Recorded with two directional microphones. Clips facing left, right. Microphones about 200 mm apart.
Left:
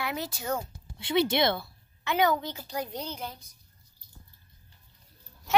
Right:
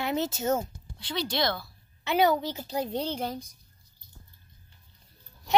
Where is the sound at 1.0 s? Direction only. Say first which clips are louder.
Left 5 dB; 25° left (ahead or behind).